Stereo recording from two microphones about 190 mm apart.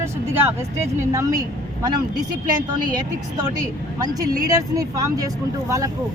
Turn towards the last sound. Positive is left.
turn(degrees=-15)  # may be behind; listen again after turning